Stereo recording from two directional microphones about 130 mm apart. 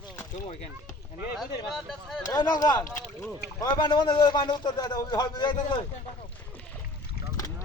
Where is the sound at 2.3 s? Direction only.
30° left (ahead or behind).